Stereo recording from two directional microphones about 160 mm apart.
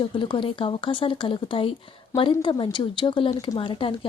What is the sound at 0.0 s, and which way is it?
Speech, 30° left (ahead or behind).